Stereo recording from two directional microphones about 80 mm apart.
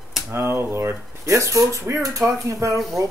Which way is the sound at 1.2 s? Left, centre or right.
Right.